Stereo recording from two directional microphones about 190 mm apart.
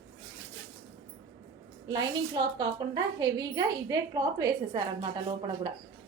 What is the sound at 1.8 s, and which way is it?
A woman's voice, 20° right (ahead or behind).